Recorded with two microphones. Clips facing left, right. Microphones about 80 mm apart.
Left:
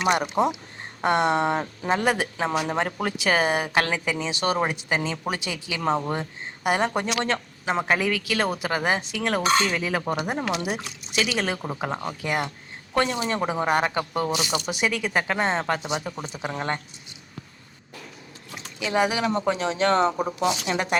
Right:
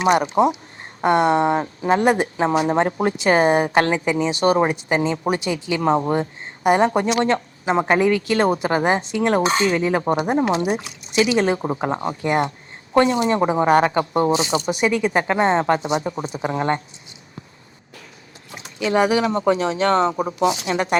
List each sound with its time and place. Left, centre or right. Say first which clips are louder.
1.0 s speech: right 5 dB; right
19.2 s speech: right 5 dB; right